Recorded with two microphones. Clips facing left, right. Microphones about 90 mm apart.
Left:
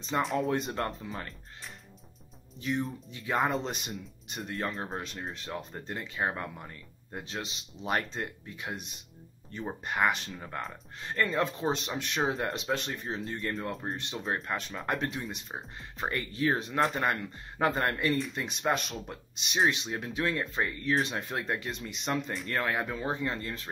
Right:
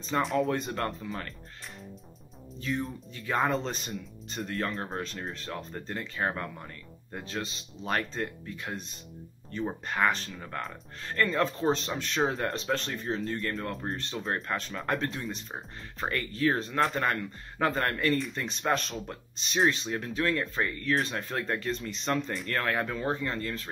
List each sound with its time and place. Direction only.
0.2 s speech: centre (ahead or behind)
0.5 s speech: 20° left (ahead or behind)
2.6 s speech: 20° left (ahead or behind)
4.7 s speech: centre (ahead or behind)
5.3 s speech: 15° left (ahead or behind)
13.9 s speech: 15° left (ahead or behind)
18.1 s speech: centre (ahead or behind)
22.3 s speech: centre (ahead or behind)
22.7 s speech: 15° left (ahead or behind)